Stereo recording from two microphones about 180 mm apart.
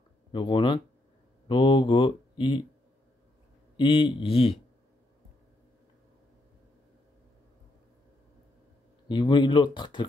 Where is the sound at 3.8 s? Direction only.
30° left (ahead or behind).